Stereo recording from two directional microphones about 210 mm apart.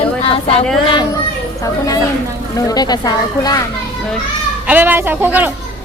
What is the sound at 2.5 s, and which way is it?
Speech, 15° left (ahead or behind).